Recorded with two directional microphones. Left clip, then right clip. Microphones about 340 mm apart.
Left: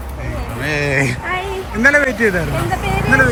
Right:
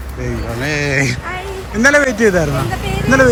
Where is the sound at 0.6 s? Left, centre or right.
Centre.